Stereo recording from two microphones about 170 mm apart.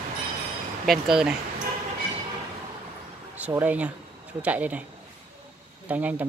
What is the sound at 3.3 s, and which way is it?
Speech, 10° right (ahead or behind).